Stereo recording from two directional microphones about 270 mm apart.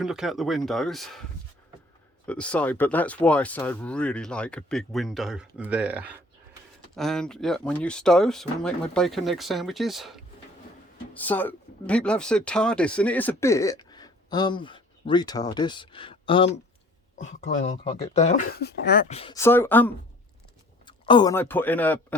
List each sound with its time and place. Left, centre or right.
0.0 s speech: centre
2.2 s speech: centre; by 19.1 s left
19.1 s speech: left
19.4 s speech: centre